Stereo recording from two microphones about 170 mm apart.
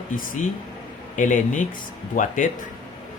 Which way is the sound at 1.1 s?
50° left (ahead or behind).